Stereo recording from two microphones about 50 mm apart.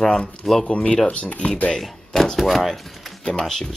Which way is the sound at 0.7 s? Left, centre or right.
Left.